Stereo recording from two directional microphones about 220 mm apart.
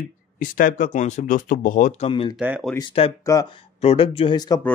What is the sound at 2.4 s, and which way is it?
Speech, 5° right (ahead or behind).